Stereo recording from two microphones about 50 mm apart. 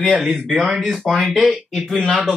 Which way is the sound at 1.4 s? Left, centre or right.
Right.